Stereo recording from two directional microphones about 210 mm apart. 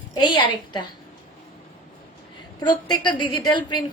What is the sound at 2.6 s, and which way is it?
A woman's voice, 20° left (ahead or behind).